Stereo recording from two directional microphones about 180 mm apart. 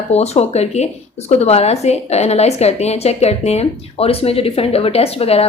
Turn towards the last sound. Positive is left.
turn(degrees=35)  # may be behind; listen again after turning